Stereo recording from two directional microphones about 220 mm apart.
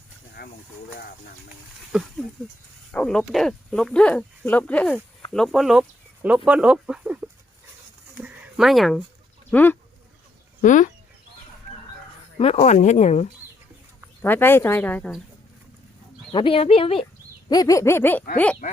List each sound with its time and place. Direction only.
0.4 s snake: 45° left (ahead or behind)
1.9 s speech: centre (ahead or behind)
8.2 s a sound: centre (ahead or behind)
9.5 s speech: 10° left (ahead or behind)
10.6 s speech: 35° left (ahead or behind)
12.5 s speech: 30° left (ahead or behind)
14.2 s speech: 10° left (ahead or behind)
16.3 s speech: 25° left (ahead or behind)